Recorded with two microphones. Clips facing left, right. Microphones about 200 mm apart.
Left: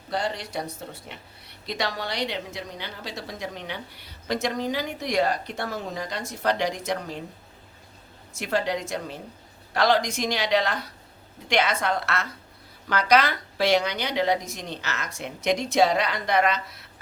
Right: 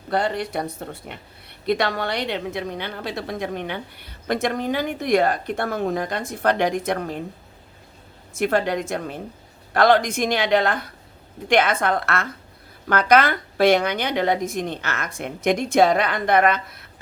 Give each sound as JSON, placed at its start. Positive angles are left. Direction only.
{"t": 0.1, "sound": "speech", "side_deg": -55}
{"t": 8.3, "sound": "a woman's voice", "side_deg": -55}